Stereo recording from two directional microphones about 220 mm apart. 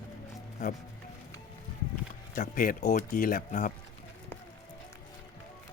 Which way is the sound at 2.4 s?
40° left (ahead or behind).